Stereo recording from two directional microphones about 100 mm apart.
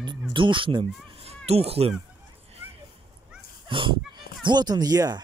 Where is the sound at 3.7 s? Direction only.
55° right (ahead or behind).